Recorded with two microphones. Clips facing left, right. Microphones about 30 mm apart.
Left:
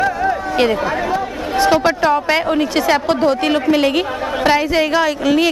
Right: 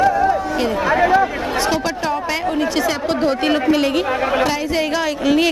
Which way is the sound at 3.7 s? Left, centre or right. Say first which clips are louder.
Left 1 dB; centre.